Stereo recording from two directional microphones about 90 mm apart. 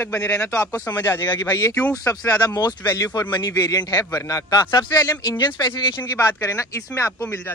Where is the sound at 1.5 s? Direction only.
40° left (ahead or behind).